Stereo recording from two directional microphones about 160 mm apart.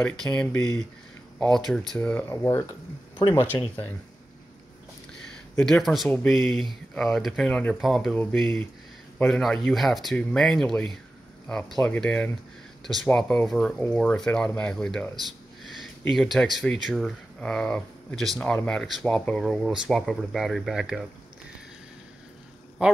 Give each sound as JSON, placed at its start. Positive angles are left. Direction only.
{"t": 0.0, "sound": "speech", "side_deg": 5}
{"t": 3.3, "sound": "speech", "side_deg": 30}
{"t": 5.6, "sound": "speech", "side_deg": 5}
{"t": 16.1, "sound": "speech", "side_deg": 0}
{"t": 22.8, "sound": "speech", "side_deg": -5}